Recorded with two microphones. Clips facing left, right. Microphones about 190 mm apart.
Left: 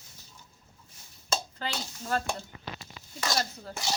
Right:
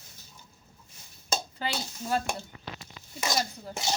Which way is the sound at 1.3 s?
15° right (ahead or behind).